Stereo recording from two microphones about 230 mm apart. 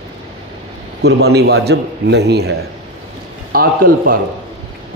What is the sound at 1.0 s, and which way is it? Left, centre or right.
A man's voice, right.